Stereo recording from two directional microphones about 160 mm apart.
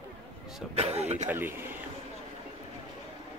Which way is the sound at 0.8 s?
40° right (ahead or behind).